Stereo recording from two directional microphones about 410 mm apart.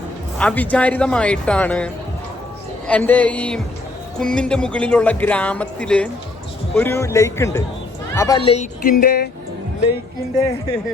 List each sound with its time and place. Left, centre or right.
0.3 s speech: centre; by 9.3 s left